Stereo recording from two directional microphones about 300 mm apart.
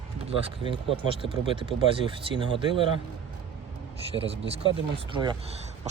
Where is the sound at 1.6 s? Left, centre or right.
Centre.